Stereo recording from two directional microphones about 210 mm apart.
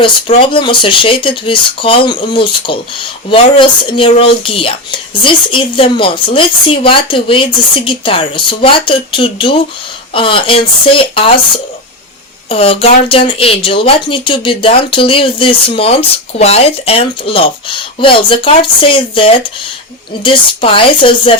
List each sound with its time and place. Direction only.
0.0 s speech: 25° left (ahead or behind)